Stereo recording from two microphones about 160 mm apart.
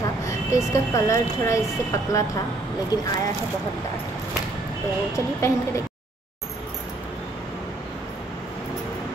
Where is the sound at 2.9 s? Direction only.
25° left (ahead or behind).